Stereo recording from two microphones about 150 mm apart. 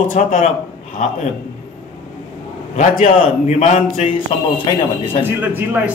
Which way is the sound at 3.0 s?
50° left (ahead or behind).